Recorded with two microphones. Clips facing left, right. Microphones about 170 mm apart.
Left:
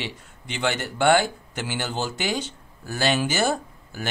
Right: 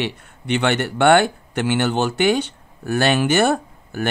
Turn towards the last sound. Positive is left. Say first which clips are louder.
# right 9 dB
turn(degrees=-60)  # may be behind; listen again after turning